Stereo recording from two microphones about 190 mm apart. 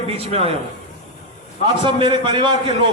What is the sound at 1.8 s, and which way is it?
Speech, 25° right (ahead or behind).